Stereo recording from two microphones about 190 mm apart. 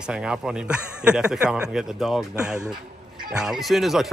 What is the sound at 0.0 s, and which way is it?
A man's voice, 5° right (ahead or behind).